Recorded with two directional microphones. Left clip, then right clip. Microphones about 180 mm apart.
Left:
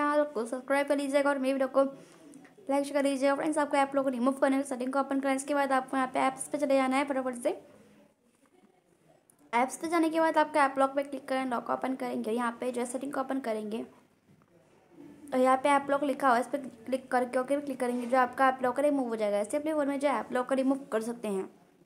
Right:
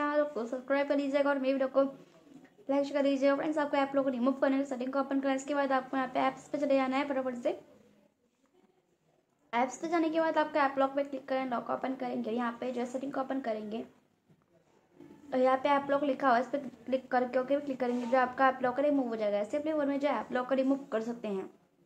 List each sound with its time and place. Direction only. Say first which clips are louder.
0.0 s a woman's voice: left 3 dB; 20° left (ahead or behind)
9.5 s a woman's voice: left 2 dB; 20° left (ahead or behind)
15.2 s a woman's voice: left 2 dB; 20° left (ahead or behind)